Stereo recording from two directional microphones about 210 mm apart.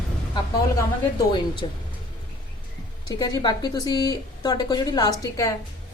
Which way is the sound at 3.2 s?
20° left (ahead or behind).